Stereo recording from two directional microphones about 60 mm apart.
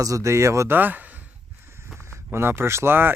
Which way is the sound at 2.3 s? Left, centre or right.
Right.